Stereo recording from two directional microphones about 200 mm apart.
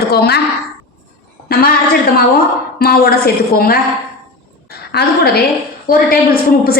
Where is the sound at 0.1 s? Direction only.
50° left (ahead or behind).